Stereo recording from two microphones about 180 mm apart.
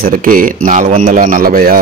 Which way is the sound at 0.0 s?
50° right (ahead or behind).